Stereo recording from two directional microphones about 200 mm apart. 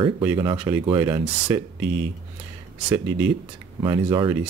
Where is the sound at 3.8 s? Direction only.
20° right (ahead or behind).